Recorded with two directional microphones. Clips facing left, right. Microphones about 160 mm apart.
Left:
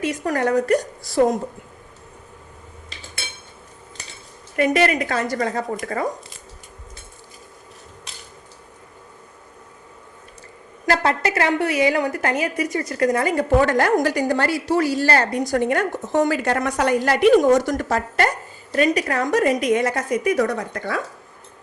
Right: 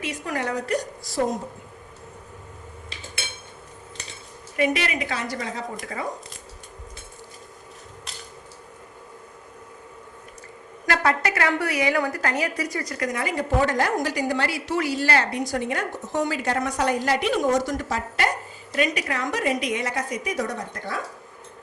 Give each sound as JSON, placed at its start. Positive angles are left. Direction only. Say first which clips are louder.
{"t": 0.0, "sound": "a woman's voice", "louder": "left 7 dB", "side_deg": 45}
{"t": 4.5, "sound": "a woman's voice", "louder": "left 6 dB", "side_deg": 50}
{"t": 10.8, "sound": "a woman's voice", "louder": "left 3 dB", "side_deg": 30}
{"t": 13.1, "sound": "a woman's voice", "louder": "left 7 dB", "side_deg": 45}
{"t": 13.7, "sound": "a woman's voice", "louder": "left 6 dB", "side_deg": 60}
{"t": 18.7, "sound": "a woman's voice", "louder": "left 6 dB", "side_deg": 40}